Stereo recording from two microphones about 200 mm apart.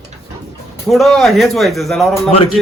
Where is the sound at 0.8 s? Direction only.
Centre (ahead or behind).